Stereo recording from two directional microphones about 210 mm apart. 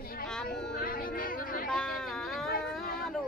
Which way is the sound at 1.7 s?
Centre (ahead or behind).